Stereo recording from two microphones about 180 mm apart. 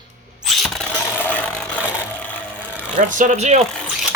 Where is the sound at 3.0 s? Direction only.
45° right (ahead or behind).